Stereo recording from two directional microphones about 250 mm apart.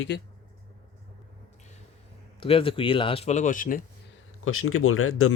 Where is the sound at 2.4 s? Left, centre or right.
Left.